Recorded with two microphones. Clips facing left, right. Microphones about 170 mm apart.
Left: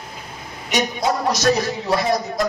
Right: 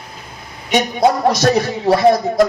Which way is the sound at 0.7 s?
55° right (ahead or behind).